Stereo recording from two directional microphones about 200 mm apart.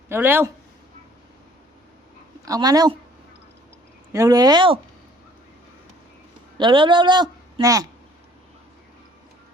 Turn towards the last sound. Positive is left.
turn(degrees=-15)  # may be behind; listen again after turning